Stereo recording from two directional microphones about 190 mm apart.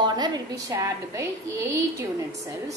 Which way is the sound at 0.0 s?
20° right (ahead or behind).